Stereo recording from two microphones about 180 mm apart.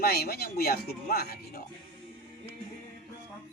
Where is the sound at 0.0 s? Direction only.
60° left (ahead or behind).